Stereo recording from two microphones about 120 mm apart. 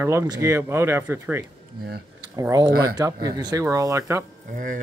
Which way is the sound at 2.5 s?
35° right (ahead or behind).